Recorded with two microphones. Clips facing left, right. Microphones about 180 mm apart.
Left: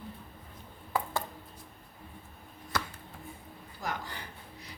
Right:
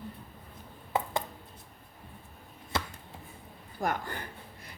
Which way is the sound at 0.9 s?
25° right (ahead or behind).